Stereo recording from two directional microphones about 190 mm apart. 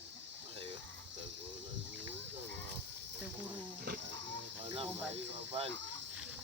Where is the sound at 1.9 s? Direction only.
70° right (ahead or behind).